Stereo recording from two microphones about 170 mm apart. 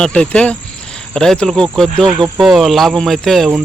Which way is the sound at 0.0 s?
5° left (ahead or behind).